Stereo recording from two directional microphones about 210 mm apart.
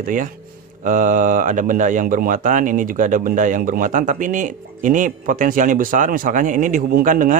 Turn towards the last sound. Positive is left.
turn(degrees=-40)  # may be behind; listen again after turning